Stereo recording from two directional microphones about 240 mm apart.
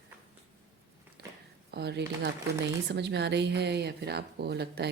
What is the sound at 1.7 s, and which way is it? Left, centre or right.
Speech, right.